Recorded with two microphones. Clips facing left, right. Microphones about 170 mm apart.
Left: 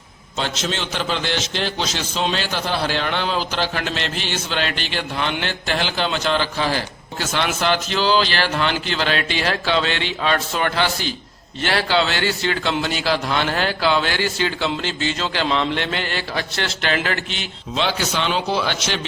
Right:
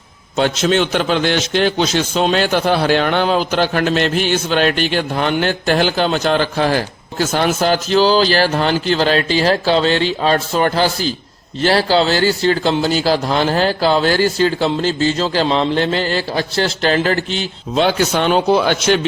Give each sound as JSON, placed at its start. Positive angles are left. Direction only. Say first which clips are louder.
{"t": 0.3, "sound": "a man's voice", "louder": "right 10 dB", "side_deg": -55}